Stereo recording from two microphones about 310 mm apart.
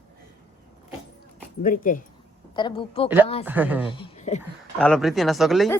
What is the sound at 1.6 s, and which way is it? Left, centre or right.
A child's voice, left.